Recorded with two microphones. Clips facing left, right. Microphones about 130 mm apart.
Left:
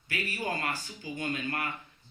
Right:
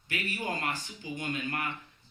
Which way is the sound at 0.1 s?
15° right (ahead or behind).